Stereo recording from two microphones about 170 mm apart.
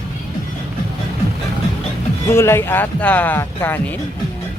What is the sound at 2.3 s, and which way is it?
Speech, 15° left (ahead or behind).